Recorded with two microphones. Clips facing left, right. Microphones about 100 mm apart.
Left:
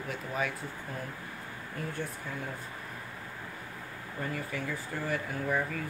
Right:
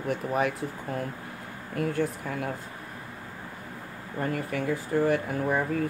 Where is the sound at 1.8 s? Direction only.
70° right (ahead or behind).